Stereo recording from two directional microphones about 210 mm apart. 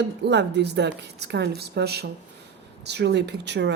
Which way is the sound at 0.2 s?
55° right (ahead or behind).